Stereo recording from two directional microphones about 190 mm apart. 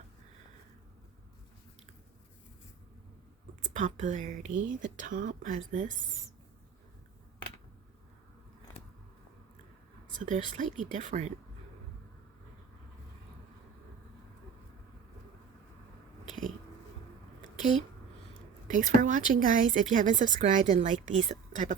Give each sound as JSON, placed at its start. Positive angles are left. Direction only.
{"t": 3.6, "sound": "speech", "side_deg": -40}
{"t": 10.2, "sound": "speech", "side_deg": -40}
{"t": 18.7, "sound": "speech", "side_deg": -40}